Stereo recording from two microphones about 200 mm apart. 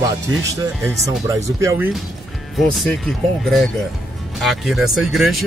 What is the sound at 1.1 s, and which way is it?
Speech, 15° right (ahead or behind).